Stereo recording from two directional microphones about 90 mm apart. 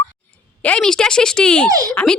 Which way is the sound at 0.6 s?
10° left (ahead or behind).